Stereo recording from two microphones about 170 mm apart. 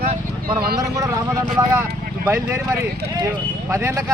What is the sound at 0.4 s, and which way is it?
Speech, 65° right (ahead or behind).